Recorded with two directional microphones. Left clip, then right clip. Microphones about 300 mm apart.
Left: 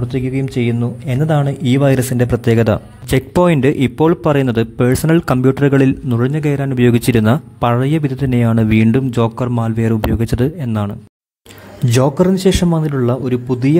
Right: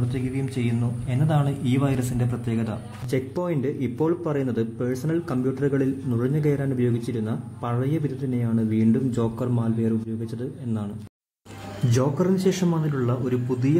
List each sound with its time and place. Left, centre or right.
0.1 s a man's voice: left
11.9 s a man's voice: left